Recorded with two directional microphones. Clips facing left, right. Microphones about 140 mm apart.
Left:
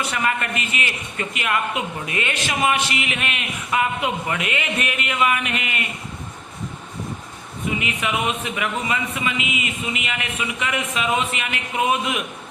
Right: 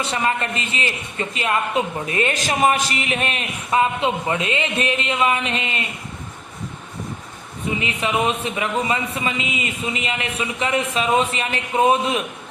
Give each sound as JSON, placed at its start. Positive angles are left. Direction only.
{"t": 0.0, "sound": "a man's voice", "side_deg": -30}
{"t": 7.8, "sound": "a man's voice", "side_deg": -30}